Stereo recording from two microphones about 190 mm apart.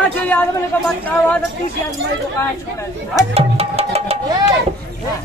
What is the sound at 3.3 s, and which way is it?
Music, 30° right (ahead or behind).